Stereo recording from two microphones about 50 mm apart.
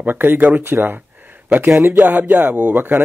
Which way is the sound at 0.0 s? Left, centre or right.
Right.